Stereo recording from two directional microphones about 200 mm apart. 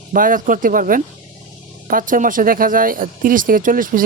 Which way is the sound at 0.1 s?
45° right (ahead or behind).